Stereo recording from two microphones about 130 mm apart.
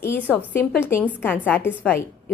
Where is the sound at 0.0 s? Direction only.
15° left (ahead or behind).